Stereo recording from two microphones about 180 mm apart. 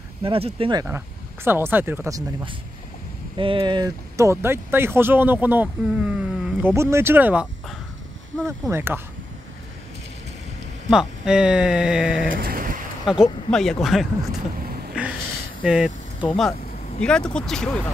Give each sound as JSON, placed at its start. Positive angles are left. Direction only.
{"t": 0.2, "sound": "speech", "side_deg": -30}
{"t": 0.8, "sound": "speech", "side_deg": -10}
{"t": 6.7, "sound": "speech", "side_deg": -15}
{"t": 8.5, "sound": "speech", "side_deg": -15}
{"t": 10.9, "sound": "speech", "side_deg": -5}
{"t": 12.3, "sound": "a sound", "side_deg": -50}
{"t": 13.2, "sound": "speech", "side_deg": 0}
{"t": 15.0, "sound": "a sound", "side_deg": -5}
{"t": 15.6, "sound": "speech", "side_deg": -5}